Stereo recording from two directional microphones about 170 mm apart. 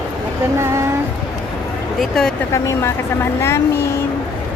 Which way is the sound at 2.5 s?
15° left (ahead or behind).